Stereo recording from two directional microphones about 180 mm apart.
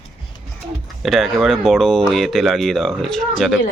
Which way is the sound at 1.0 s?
Centre (ahead or behind).